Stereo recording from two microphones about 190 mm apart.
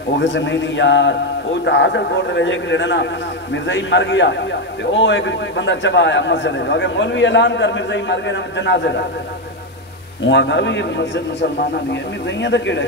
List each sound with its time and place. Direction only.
0.2 s a man's voice: 70° left (ahead or behind)
10.2 s a man's voice: 65° left (ahead or behind)